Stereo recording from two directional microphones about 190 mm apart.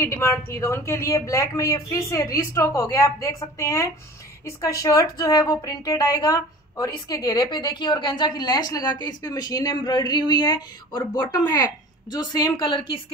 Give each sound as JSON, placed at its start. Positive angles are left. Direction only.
{"t": 0.0, "sound": "a woman's voice", "side_deg": 15}